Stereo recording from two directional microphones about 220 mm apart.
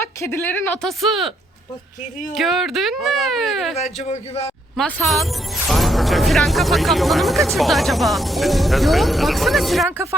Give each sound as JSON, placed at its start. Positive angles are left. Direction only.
{"t": 0.2, "sound": "speech", "side_deg": 10}
{"t": 2.3, "sound": "speech", "side_deg": 0}
{"t": 3.8, "sound": "a man's voice", "side_deg": 30}
{"t": 4.8, "sound": "speech", "side_deg": 0}